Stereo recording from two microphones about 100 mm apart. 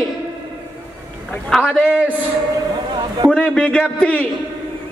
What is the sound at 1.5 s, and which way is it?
Speech, 5° left (ahead or behind).